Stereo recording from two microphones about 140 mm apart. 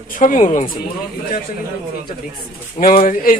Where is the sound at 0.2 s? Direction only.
65° left (ahead or behind).